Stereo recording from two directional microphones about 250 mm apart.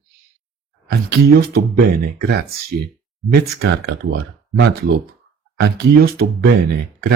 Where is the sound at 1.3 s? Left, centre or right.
Right.